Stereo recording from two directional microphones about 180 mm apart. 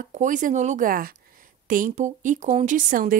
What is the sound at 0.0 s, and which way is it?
A woman's voice, 45° right (ahead or behind).